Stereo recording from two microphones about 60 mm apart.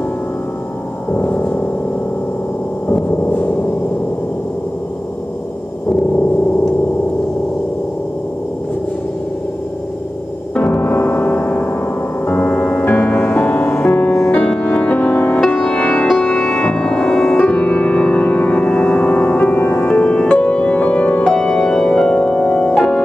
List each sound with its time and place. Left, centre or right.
1.1 s gong: left
3.1 s gong: left
10.5 s music: left
12.8 s music: left
13.1 s music: left
16.1 s music: centre; by 21.2 s left
21.2 s music: centre